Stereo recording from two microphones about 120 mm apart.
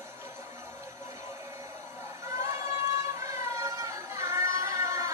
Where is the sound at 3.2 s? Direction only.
25° right (ahead or behind).